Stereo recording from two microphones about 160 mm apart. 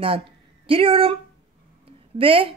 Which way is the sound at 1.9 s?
35° right (ahead or behind).